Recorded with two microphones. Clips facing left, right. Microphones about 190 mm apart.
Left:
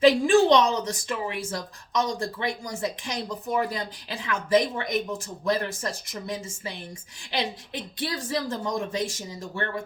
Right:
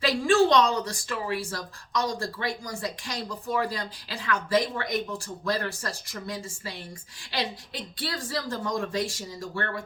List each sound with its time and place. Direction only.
0.0 s a woman's voice: 20° left (ahead or behind)
7.9 s a woman's voice: 20° left (ahead or behind)